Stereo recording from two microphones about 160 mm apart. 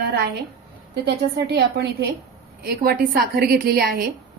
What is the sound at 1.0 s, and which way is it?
A woman's voice, 90° right.